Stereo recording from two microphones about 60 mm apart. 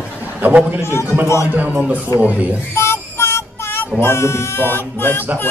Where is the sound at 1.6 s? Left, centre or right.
Right.